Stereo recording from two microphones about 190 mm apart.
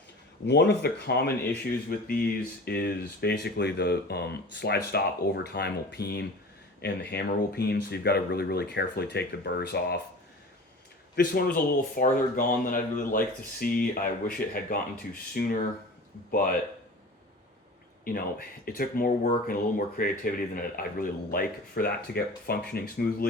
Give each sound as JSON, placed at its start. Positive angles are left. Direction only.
{"t": 0.4, "sound": "speech", "side_deg": 65}
{"t": 11.1, "sound": "a man's voice", "side_deg": 50}
{"t": 18.0, "sound": "speech", "side_deg": 50}